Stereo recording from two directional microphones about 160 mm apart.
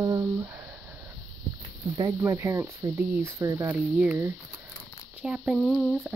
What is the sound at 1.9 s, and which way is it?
Speech, 20° right (ahead or behind).